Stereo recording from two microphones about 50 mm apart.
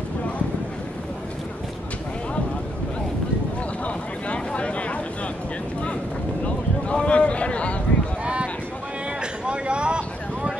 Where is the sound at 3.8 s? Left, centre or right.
Left.